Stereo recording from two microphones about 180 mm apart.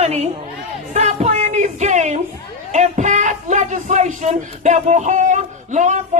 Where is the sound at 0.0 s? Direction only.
35° right (ahead or behind).